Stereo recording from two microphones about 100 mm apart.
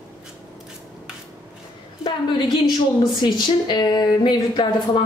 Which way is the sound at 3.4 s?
45° left (ahead or behind).